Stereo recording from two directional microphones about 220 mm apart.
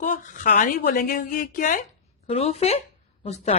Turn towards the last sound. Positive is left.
turn(degrees=30)  # may be behind; listen again after turning